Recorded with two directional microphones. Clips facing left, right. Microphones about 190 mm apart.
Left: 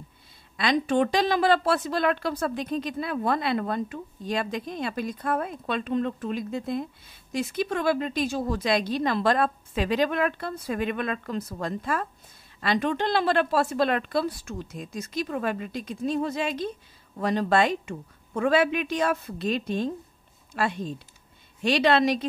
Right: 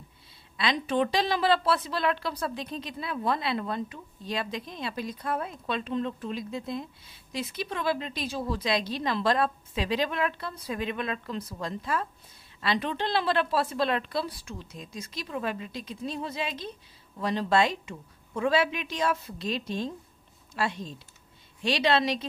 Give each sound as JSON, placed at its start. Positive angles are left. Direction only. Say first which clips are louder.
{"t": 0.6, "sound": "a woman's voice", "louder": "left 4 dB", "side_deg": 45}